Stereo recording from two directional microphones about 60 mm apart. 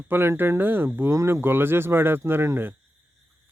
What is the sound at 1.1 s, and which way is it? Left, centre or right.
Speech, right.